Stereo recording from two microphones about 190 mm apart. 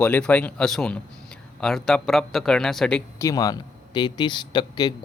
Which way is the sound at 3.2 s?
20° left (ahead or behind).